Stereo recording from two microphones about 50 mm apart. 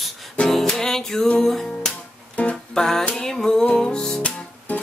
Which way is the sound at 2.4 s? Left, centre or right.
Left.